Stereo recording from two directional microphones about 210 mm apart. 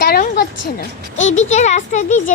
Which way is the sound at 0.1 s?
45° left (ahead or behind).